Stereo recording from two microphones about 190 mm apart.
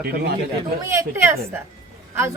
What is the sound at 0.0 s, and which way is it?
Speech, 55° right (ahead or behind).